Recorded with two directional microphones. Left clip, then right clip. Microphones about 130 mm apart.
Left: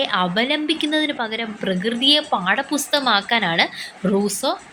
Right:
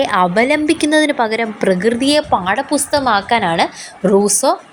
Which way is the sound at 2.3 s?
30° right (ahead or behind).